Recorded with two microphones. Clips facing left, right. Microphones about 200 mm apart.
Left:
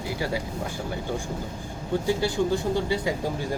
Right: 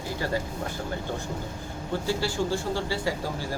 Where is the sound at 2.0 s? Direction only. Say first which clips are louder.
Left 3 dB; 20° left (ahead or behind).